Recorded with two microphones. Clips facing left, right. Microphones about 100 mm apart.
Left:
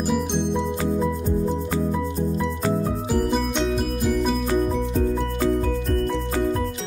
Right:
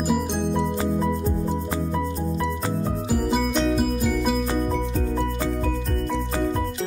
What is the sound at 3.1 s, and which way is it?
Music, 5° right (ahead or behind).